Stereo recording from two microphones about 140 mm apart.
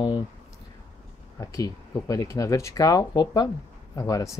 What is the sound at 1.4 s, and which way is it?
Speech, 25° left (ahead or behind).